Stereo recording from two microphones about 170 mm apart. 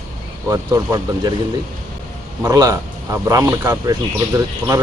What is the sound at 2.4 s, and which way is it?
Speech, 20° right (ahead or behind).